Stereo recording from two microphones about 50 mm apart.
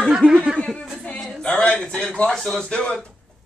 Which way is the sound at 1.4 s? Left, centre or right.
Left.